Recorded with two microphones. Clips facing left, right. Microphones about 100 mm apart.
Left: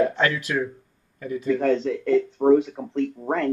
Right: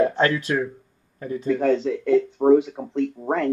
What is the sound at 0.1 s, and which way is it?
Speech, 35° right (ahead or behind).